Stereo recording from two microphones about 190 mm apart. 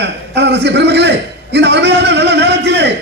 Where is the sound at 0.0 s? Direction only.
65° right (ahead or behind).